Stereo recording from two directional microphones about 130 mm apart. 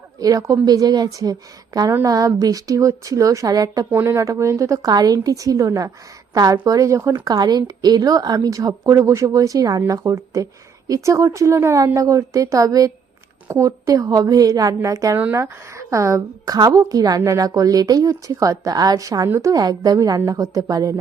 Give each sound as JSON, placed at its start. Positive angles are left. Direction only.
{"t": 0.2, "sound": "a woman's voice", "side_deg": -25}